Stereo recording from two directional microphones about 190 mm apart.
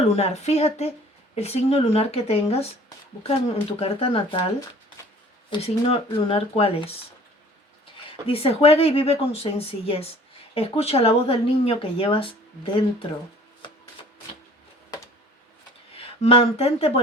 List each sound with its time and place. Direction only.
0.2 s a woman's voice: 35° left (ahead or behind)
8.3 s a woman's voice: 30° left (ahead or behind)
16.2 s a woman's voice: 30° left (ahead or behind)